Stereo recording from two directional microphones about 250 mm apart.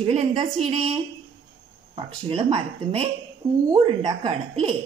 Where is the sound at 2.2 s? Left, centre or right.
Right.